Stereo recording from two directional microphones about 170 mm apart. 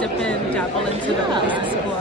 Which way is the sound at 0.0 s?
5° left (ahead or behind).